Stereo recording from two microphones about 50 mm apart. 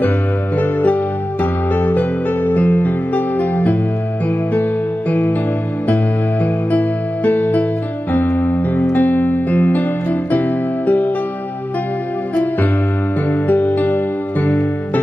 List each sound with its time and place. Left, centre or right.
0.6 s music: left
6.4 s music: left
13.3 s music: left